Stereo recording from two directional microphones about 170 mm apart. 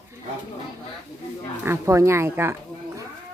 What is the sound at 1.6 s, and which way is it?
Speech, 15° right (ahead or behind).